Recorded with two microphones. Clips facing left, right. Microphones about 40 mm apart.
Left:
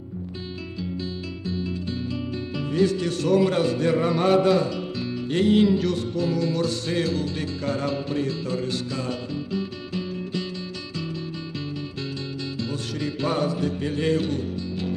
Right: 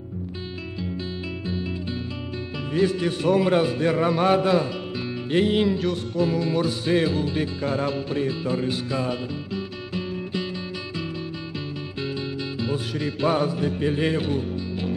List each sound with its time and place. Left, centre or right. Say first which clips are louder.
1.4 s music: left 2 dB; right
12.5 s music: right 3 dB; centre